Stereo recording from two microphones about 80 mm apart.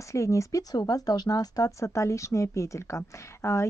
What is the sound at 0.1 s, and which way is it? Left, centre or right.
Speech, left.